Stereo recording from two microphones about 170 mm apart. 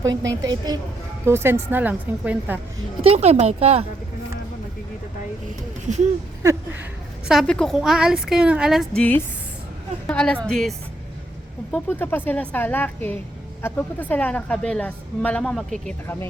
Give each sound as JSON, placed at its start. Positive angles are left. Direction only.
{"t": 0.1, "sound": "a woman's voice", "side_deg": -90}
{"t": 0.4, "sound": "a woman's voice", "side_deg": -25}
{"t": 3.0, "sound": "speech", "side_deg": -40}
{"t": 5.9, "sound": "speech", "side_deg": -45}
{"t": 6.4, "sound": "a sound", "side_deg": -20}
{"t": 7.3, "sound": "a woman's voice", "side_deg": 0}
{"t": 9.0, "sound": "a woman's voice", "side_deg": 10}